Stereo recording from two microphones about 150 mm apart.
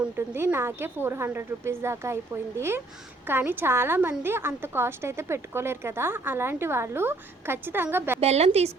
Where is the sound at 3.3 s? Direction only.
15° right (ahead or behind).